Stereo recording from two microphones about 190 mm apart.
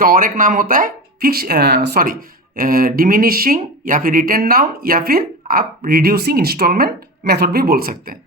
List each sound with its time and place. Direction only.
0.0 s speech: 45° right (ahead or behind)